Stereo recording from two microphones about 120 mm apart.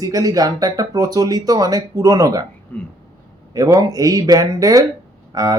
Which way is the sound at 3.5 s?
30° right (ahead or behind).